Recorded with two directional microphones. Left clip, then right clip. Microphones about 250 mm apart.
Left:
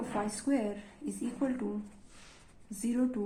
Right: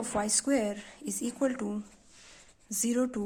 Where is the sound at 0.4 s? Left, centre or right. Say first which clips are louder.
Right 3 dB; right.